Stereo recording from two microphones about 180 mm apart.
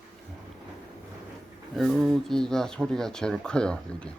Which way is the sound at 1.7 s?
Centre (ahead or behind).